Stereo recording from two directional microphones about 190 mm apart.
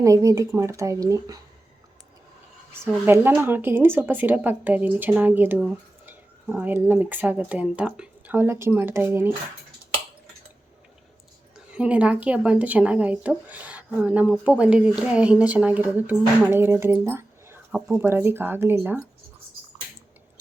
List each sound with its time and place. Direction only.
0.0 s a woman's voice: 15° right (ahead or behind)
3.1 s a woman's voice: 10° right (ahead or behind)
11.7 s a woman's voice: 5° right (ahead or behind)